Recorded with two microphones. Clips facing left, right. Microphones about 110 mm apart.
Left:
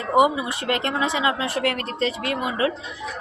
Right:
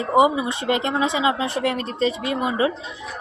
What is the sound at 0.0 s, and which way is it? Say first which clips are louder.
A woman's voice: right 1 dB; 20° right (ahead or behind).